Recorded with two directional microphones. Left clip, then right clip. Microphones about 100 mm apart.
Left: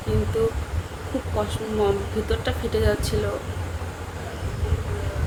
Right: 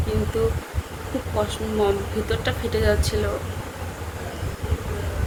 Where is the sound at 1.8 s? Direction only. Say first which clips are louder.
Right 1 dB; 15° left (ahead or behind).